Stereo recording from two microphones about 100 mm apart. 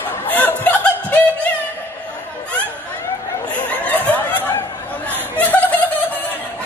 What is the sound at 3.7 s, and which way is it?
Snicker, 15° left (ahead or behind).